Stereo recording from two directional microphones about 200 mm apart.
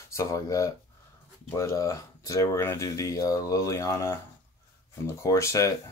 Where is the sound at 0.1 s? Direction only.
15° left (ahead or behind).